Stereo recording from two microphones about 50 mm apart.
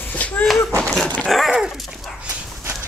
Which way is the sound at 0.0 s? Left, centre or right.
Left.